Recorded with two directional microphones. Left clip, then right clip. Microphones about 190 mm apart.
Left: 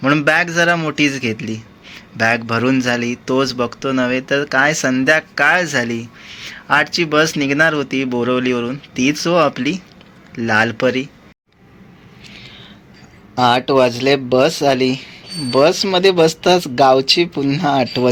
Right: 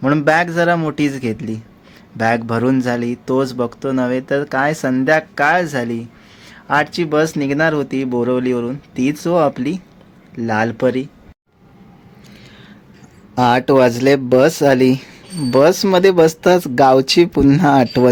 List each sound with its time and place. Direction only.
0.0 s speech: 25° right (ahead or behind)
13.3 s speech: 35° right (ahead or behind)